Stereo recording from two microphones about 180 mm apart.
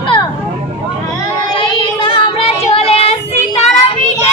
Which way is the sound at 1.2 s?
30° left (ahead or behind).